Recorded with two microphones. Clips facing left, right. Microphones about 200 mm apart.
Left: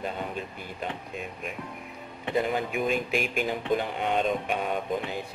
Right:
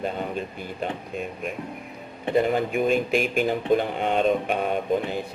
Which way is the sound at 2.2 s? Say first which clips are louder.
Right 5 dB; 45° right (ahead or behind).